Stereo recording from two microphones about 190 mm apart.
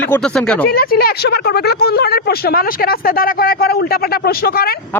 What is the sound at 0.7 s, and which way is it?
Speech, 55° left (ahead or behind).